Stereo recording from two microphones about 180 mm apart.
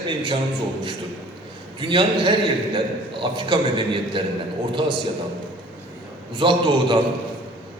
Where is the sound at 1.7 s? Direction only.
25° right (ahead or behind).